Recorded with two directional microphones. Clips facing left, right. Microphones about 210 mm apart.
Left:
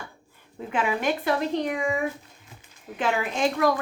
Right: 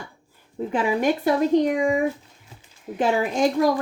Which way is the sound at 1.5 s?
15° right (ahead or behind).